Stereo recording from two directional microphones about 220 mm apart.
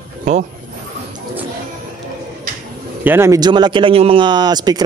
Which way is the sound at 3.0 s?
10° right (ahead or behind).